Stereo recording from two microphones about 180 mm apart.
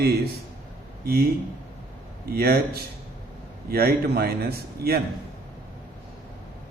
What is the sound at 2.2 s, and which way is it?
A man's voice, 60° right (ahead or behind).